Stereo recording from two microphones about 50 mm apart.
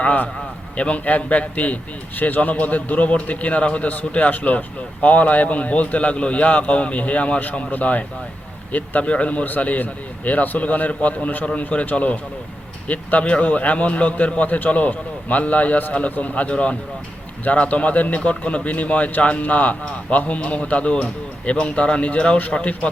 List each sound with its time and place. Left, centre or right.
0.0 s a man's voice: left